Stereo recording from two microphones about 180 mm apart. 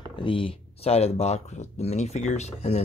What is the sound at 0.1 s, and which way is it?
Speech, 30° left (ahead or behind).